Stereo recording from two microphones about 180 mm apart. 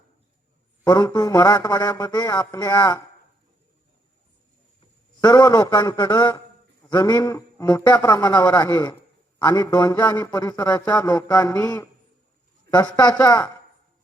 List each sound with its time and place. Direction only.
0.9 s a man's voice: 20° left (ahead or behind)
2.4 s speech: 10° left (ahead or behind)
2.6 s a man's voice: 20° left (ahead or behind)
5.2 s a man's voice: 20° left (ahead or behind)